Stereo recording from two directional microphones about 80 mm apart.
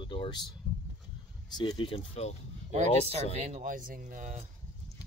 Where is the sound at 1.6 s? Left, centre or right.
Left.